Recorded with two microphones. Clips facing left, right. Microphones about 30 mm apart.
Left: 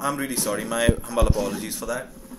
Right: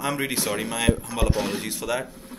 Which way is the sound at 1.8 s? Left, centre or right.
Right.